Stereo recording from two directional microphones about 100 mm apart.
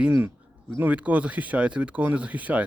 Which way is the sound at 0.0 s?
20° right (ahead or behind).